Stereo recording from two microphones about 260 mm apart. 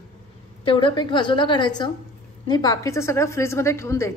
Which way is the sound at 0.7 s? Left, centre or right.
Centre.